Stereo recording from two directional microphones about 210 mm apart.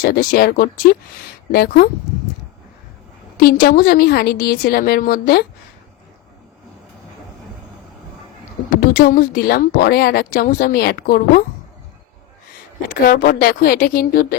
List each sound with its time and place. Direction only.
0.0 s speech: 40° left (ahead or behind)
3.3 s speech: 45° left (ahead or behind)
8.7 s speech: 40° left (ahead or behind)
12.9 s speech: 45° left (ahead or behind)